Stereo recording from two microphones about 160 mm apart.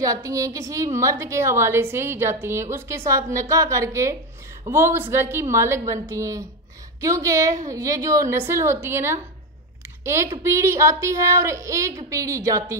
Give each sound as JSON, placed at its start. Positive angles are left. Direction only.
{"t": 0.0, "sound": "a woman's voice", "side_deg": -20}